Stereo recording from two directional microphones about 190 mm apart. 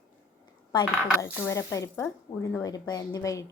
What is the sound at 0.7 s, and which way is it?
A woman's voice, 20° left (ahead or behind).